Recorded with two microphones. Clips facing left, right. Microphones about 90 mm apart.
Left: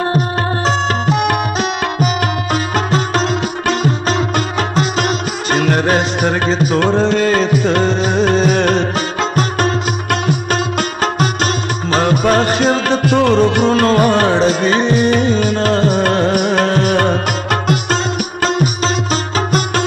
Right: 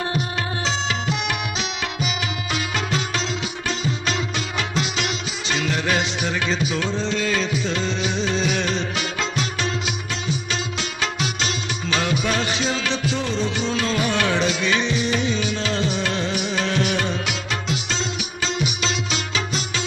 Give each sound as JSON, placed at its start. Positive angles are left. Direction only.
{"t": 0.7, "sound": "music", "side_deg": 50}
{"t": 2.5, "sound": "sitar", "side_deg": 45}
{"t": 4.6, "sound": "music", "side_deg": 45}
{"t": 19.3, "sound": "music", "side_deg": 55}